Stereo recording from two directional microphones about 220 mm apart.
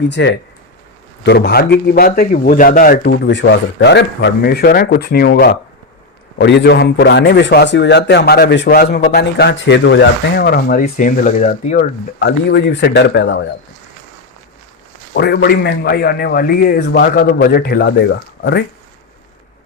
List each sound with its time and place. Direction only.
0.1 s a man's voice: 50° left (ahead or behind); by 11.9 s 30° left (ahead or behind)
12.2 s a man's voice: 50° left (ahead or behind)
15.1 s a man's voice: 45° left (ahead or behind)